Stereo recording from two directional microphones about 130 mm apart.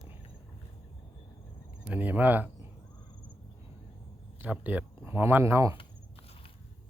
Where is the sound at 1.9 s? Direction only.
10° right (ahead or behind).